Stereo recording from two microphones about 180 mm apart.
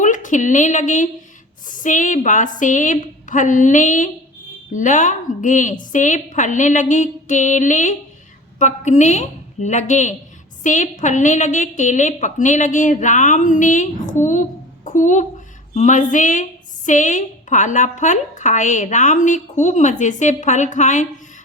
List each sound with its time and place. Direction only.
0.0 s a woman's voice: 45° left (ahead or behind)